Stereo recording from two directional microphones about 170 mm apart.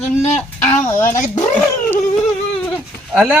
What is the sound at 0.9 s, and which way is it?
Speech, 15° left (ahead or behind).